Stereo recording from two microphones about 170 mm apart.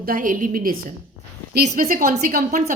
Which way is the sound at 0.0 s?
55° right (ahead or behind).